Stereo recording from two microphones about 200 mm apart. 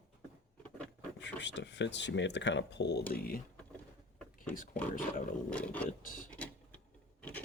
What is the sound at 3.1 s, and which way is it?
Speech, 50° left (ahead or behind).